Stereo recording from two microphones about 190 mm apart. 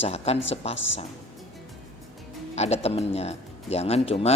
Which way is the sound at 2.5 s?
35° left (ahead or behind).